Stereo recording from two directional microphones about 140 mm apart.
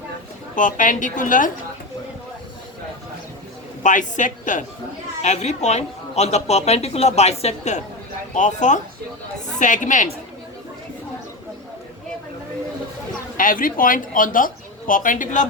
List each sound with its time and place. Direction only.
0.5 s a woman's voice: 65° left (ahead or behind)
3.8 s a woman's voice: 65° left (ahead or behind)
5.2 s a woman's voice: 55° left (ahead or behind)
13.3 s speech: 80° left